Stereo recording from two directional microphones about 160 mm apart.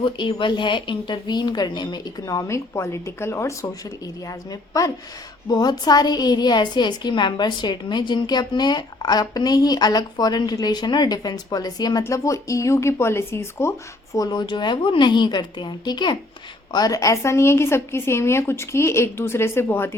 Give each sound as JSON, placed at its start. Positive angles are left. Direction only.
{"t": 0.0, "sound": "a woman's voice", "side_deg": 30}